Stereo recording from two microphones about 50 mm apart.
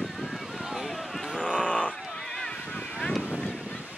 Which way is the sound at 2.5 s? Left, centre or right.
Left.